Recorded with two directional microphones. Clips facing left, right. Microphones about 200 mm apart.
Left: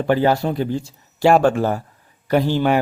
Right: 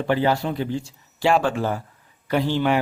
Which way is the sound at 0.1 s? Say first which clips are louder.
Left 4 dB; 45° left (ahead or behind).